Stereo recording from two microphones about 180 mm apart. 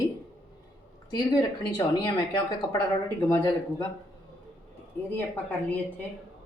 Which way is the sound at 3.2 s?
15° left (ahead or behind).